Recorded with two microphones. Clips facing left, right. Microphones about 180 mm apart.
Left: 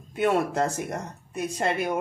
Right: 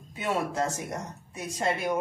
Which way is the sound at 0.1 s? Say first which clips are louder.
Left 6 dB; 60° left (ahead or behind).